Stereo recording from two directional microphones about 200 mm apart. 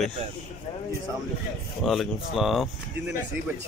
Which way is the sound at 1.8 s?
Centre (ahead or behind).